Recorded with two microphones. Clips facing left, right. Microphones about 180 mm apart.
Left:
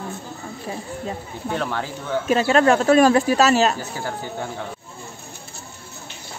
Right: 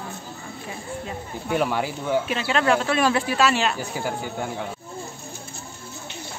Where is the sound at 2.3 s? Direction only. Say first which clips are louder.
Left 10 dB; 45° left (ahead or behind).